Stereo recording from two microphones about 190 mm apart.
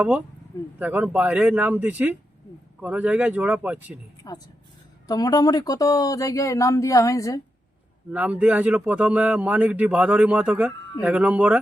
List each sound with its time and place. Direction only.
0.0 s speech: 5° right (ahead or behind)
4.2 s speech: 20° left (ahead or behind)
8.1 s speech: 5° right (ahead or behind)